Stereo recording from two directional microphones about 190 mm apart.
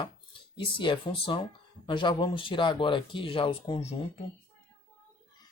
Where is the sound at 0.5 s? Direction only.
25° left (ahead or behind).